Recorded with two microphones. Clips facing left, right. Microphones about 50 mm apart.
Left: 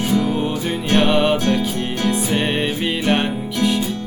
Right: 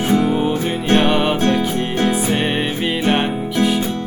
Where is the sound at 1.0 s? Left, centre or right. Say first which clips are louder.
Even; centre.